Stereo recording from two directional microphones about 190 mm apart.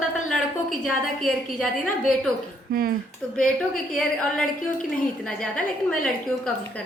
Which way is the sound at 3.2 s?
5° left (ahead or behind).